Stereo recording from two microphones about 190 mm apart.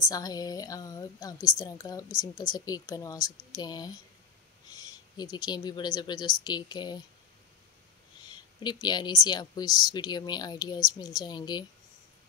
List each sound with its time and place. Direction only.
0.1 s speech: 20° left (ahead or behind)
8.3 s speech: 25° left (ahead or behind)